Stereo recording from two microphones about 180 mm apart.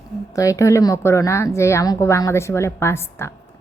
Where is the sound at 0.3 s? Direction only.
20° left (ahead or behind).